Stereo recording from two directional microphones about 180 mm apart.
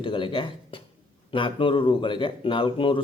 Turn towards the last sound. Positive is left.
turn(degrees=30)  # may be behind; listen again after turning